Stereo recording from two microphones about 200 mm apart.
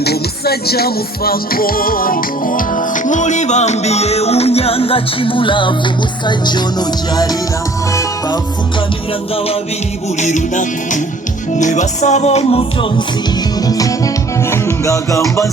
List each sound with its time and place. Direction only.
0.0 s music: 50° left (ahead or behind); by 7.3 s 20° left (ahead or behind)
10.2 s music: 35° left (ahead or behind)
13.7 s music: 15° left (ahead or behind)